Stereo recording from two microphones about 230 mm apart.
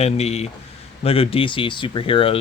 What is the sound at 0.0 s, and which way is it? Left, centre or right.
Speech, left.